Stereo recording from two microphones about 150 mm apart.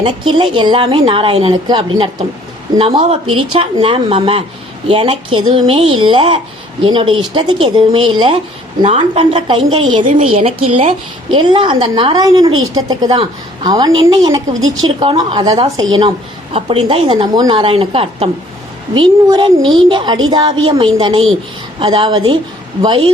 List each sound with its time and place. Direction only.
0.0 s a woman's voice: 35° right (ahead or behind)
2.7 s a woman's voice: 40° right (ahead or behind)